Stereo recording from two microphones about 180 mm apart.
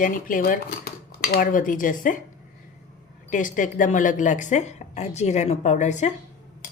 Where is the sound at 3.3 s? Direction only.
45° left (ahead or behind).